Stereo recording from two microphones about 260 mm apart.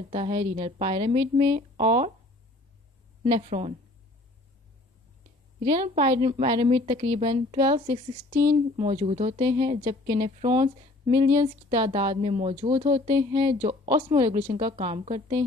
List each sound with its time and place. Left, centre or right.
0.1 s a woman's voice: right
3.3 s a woman's voice: right
5.7 s a woman's voice: right
8.7 s a woman's voice: right